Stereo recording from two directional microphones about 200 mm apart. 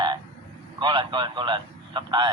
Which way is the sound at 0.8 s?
25° right (ahead or behind).